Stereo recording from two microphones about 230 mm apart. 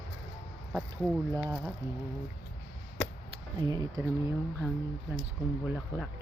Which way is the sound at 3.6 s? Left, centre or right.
Centre.